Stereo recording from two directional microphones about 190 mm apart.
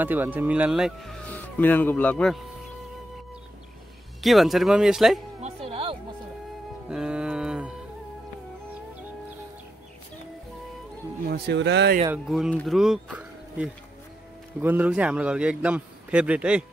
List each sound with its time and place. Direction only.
0.0 s a man's voice: 10° right (ahead or behind)
1.3 s speech: 10° left (ahead or behind)
4.2 s speech: centre (ahead or behind)
5.4 s music: 30° right (ahead or behind)
6.9 s a sound: 5° right (ahead or behind)
11.2 s speech: 60° right (ahead or behind)
12.1 s a man's voice: 5° right (ahead or behind)